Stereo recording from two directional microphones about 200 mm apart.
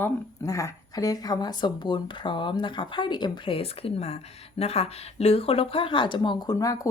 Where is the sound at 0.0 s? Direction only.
15° left (ahead or behind).